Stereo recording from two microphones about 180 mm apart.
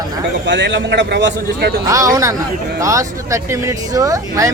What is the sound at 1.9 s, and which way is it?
Speech, 20° right (ahead or behind).